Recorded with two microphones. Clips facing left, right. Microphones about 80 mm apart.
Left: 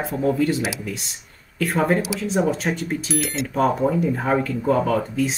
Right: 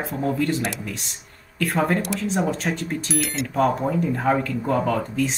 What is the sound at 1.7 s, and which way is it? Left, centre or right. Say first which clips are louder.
Speech: left 2 dB; left.